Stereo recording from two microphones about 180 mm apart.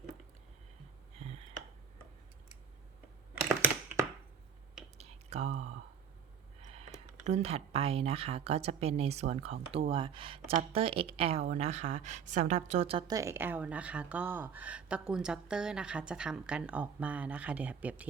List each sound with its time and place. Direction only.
4.9 s whispering: 35° right (ahead or behind)
7.3 s speech: 35° right (ahead or behind); by 18.0 s 10° right (ahead or behind)